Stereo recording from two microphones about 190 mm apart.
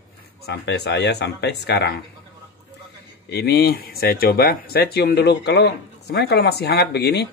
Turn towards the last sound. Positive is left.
turn(degrees=60)  # may be behind; listen again after turning